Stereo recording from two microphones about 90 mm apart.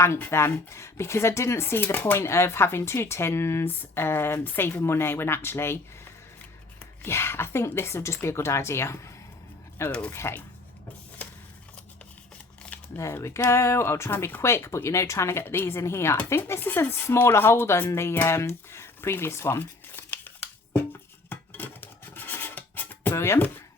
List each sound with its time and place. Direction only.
0.0 s speech: 30° left (ahead or behind)
7.0 s speech: 25° left (ahead or behind)
13.0 s speech: 30° left (ahead or behind)
21.2 s music: 20° left (ahead or behind)